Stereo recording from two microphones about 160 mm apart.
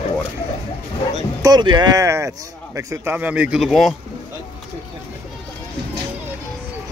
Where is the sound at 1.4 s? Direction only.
25° right (ahead or behind); by 3.9 s centre (ahead or behind).